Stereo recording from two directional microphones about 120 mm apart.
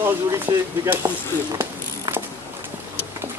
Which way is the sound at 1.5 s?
35° right (ahead or behind).